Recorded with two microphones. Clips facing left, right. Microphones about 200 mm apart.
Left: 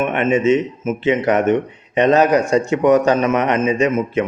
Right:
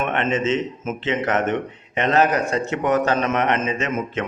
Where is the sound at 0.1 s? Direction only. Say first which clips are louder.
Left 6 dB; 10° left (ahead or behind).